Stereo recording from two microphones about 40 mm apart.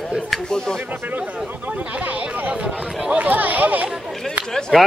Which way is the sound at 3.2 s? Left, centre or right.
Right.